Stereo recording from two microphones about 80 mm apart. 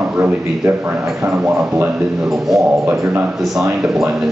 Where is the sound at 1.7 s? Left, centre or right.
Right.